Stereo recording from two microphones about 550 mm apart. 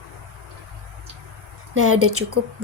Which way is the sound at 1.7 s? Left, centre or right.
Right.